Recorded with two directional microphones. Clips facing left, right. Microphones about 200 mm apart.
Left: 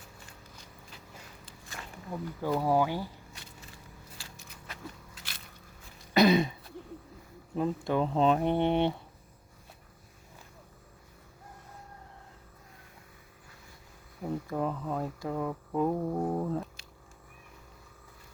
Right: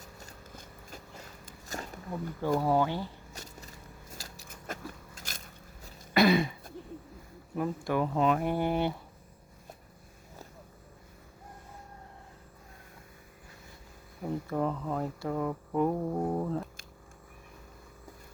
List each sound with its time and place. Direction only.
0.0 s a sound: 45° right (ahead or behind)
2.0 s speech: centre (ahead or behind)
3.3 s a sound: 40° right (ahead or behind)
6.1 s throat clearing: 20° left (ahead or behind)
7.5 s speech: 20° left (ahead or behind)
14.2 s speech: 5° left (ahead or behind)